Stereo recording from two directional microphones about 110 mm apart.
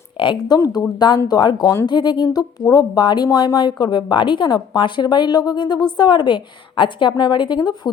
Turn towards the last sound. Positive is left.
turn(degrees=40)  # may be behind; listen again after turning